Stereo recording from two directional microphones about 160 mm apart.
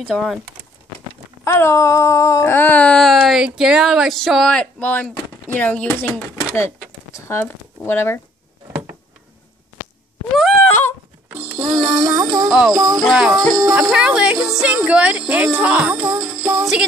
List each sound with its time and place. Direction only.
0.1 s speech: centre (ahead or behind)
1.4 s a sound: 15° left (ahead or behind)
10.7 s a sound: 15° left (ahead or behind)
11.3 s music: 10° right (ahead or behind)
12.4 s speech: 5° right (ahead or behind)
12.7 s music: 25° right (ahead or behind)
13.0 s music: centre (ahead or behind)